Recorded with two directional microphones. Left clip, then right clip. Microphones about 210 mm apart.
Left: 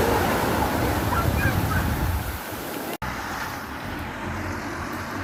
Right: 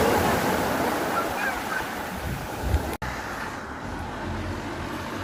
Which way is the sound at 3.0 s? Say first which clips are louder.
Left 2 dB; 55° left (ahead or behind).